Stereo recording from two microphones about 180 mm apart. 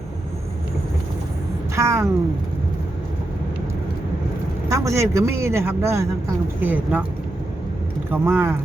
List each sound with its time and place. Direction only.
1.7 s a woman's voice: 15° right (ahead or behind)
4.7 s a man's voice: 15° right (ahead or behind)
8.1 s a man's voice: 10° right (ahead or behind)